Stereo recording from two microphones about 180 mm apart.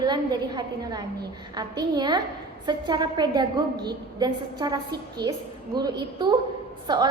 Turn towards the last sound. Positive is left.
turn(degrees=-25)  # may be behind; listen again after turning